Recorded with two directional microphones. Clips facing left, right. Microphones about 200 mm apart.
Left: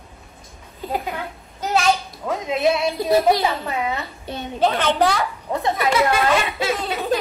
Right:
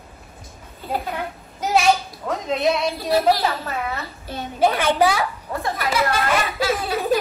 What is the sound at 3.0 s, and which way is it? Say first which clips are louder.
A child's voice: left 2 dB; 20° left (ahead or behind).